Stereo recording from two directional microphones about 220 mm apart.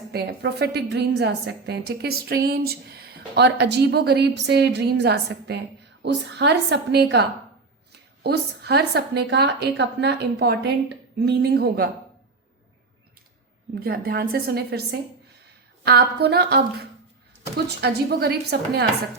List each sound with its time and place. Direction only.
0.1 s a woman's voice: 45° right (ahead or behind)
13.8 s a woman's voice: 45° right (ahead or behind)